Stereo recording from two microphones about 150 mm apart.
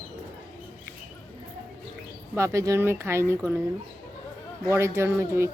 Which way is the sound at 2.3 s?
20° right (ahead or behind).